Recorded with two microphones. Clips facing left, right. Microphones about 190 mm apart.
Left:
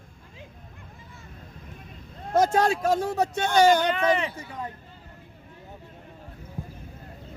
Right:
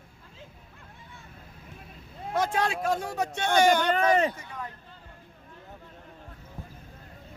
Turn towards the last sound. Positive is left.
turn(degrees=10)  # may be behind; listen again after turning